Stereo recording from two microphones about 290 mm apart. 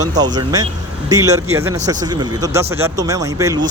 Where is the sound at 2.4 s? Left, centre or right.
Centre.